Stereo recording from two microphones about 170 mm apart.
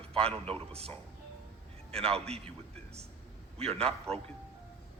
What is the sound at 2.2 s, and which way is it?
Speech, 35° right (ahead or behind).